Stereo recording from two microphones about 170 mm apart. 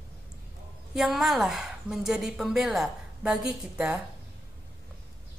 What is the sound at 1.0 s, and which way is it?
A woman's voice, centre (ahead or behind).